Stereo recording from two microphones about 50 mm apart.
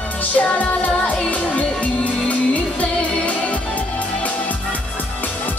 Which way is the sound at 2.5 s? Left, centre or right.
Left.